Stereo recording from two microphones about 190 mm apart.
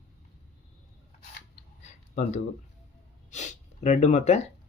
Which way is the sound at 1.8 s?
40° left (ahead or behind).